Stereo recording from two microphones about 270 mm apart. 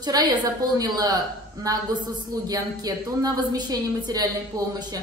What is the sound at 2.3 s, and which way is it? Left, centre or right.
A woman's voice, centre.